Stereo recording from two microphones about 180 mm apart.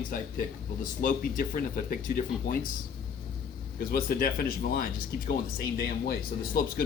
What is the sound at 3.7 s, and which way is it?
Speech, 55° left (ahead or behind).